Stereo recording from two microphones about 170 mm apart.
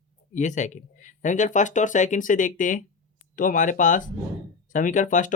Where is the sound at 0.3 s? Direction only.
45° left (ahead or behind).